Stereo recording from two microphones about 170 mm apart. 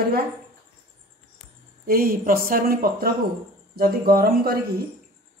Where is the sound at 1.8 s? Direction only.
60° right (ahead or behind).